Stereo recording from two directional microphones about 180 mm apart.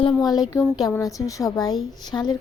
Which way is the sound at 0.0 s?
20° left (ahead or behind).